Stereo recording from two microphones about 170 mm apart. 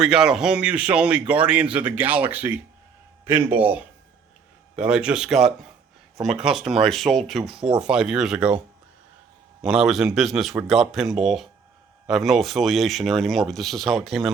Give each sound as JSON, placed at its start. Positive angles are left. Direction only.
{"t": 0.0, "sound": "speech", "side_deg": -5}